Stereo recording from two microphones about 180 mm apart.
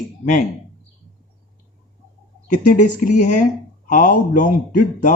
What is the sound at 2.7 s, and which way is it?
Speech, 45° left (ahead or behind).